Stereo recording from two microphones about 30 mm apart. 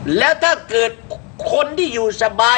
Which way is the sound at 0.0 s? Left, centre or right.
Centre.